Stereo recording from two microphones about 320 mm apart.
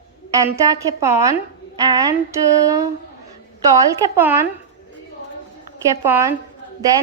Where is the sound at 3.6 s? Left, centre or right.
Centre.